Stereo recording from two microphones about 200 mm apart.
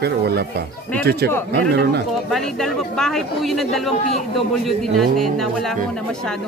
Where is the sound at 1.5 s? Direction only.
55° right (ahead or behind).